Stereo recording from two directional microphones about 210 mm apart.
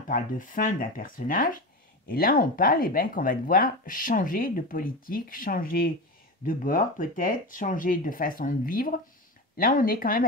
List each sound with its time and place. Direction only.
0.1 s speech: 40° left (ahead or behind)